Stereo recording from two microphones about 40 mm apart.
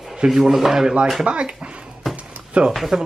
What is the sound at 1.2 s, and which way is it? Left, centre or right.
Speech, right.